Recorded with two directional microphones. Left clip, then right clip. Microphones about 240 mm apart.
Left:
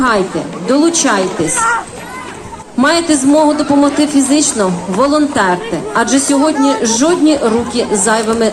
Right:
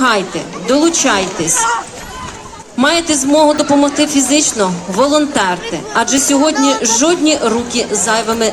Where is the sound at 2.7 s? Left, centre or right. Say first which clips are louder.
Left 1 dB; right.